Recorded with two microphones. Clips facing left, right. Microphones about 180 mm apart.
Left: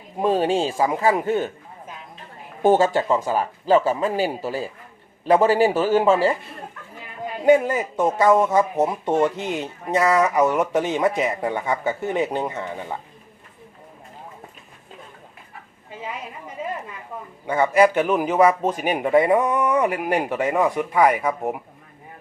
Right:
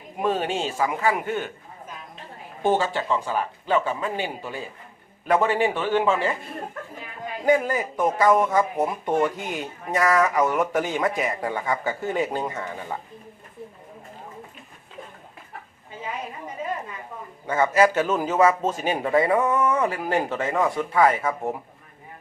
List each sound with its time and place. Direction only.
0.2 s speech: 35° left (ahead or behind)
2.6 s speech: 40° left (ahead or behind)
7.4 s speech: 20° left (ahead or behind)
17.4 s a man's voice: 15° left (ahead or behind)